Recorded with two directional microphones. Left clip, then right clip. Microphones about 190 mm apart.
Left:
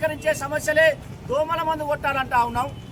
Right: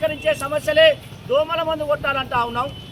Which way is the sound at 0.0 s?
20° left (ahead or behind).